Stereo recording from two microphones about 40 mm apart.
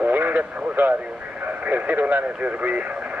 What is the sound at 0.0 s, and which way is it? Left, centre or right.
Radio, right.